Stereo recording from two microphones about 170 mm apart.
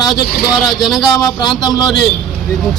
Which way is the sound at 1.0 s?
25° left (ahead or behind).